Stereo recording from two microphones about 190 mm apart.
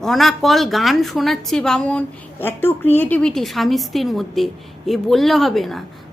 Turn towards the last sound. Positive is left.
turn(degrees=0)  # may be behind; listen again after turning